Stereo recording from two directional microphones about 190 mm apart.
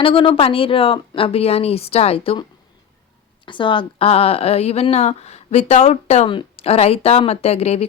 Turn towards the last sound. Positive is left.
turn(degrees=35)  # may be behind; listen again after turning